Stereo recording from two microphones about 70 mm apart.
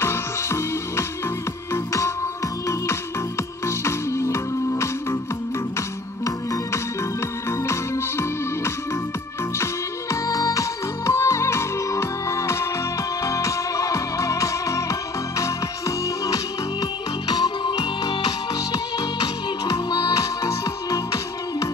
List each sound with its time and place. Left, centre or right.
0.0 s music: left
3.6 s music: left
10.2 s music: left
17.3 s music: left
20.4 s music: left